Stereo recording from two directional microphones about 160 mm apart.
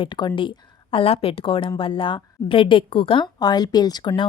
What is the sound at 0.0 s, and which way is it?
A woman's voice, 30° left (ahead or behind).